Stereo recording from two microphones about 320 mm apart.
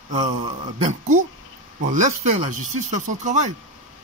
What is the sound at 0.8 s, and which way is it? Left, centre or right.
Speech, right.